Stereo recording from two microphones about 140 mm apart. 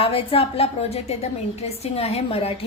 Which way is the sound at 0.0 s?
40° left (ahead or behind).